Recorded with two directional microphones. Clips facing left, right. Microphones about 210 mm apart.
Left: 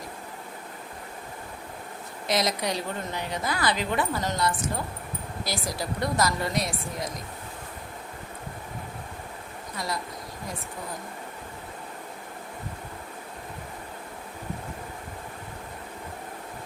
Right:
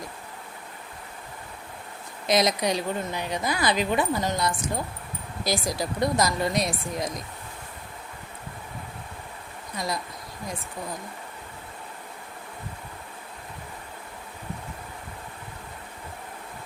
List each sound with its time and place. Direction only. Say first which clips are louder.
2.2 s a woman's voice: right 4 dB; 15° right (ahead or behind)
5.5 s a woman's voice: right 5 dB; 15° right (ahead or behind)
9.7 s a woman's voice: right 2 dB; 15° right (ahead or behind)